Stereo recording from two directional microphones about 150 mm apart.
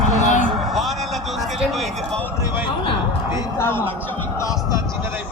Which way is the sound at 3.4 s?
15° left (ahead or behind).